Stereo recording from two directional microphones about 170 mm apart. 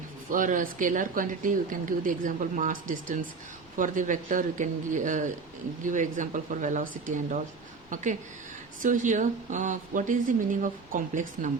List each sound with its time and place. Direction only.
0.3 s speech: 50° right (ahead or behind)
8.8 s speech: 50° right (ahead or behind)